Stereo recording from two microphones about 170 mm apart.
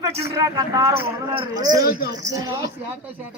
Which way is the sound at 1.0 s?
25° right (ahead or behind).